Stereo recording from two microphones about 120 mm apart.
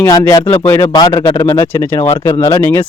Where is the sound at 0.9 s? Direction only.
35° left (ahead or behind).